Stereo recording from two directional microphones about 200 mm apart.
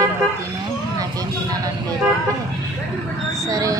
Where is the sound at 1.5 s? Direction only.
20° right (ahead or behind).